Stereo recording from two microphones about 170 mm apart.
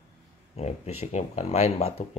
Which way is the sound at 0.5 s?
40° left (ahead or behind).